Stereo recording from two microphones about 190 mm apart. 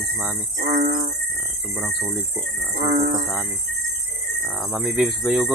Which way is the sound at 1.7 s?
10° right (ahead or behind).